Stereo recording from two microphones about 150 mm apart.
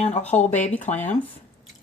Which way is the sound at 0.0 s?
45° left (ahead or behind).